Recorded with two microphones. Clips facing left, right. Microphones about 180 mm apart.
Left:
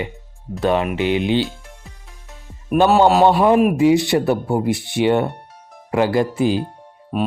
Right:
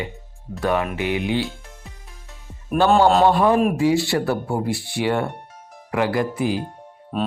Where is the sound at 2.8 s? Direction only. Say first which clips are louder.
Left 2 dB; 15° left (ahead or behind).